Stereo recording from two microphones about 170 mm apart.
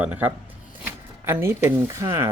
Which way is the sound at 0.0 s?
10° right (ahead or behind).